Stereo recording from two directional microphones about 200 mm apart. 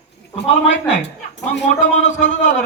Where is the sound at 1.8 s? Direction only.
35° left (ahead or behind).